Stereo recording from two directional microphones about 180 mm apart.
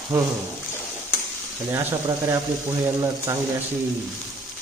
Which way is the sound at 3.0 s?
15° right (ahead or behind).